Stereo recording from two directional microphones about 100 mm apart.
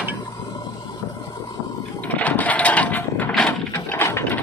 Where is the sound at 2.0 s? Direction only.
15° left (ahead or behind).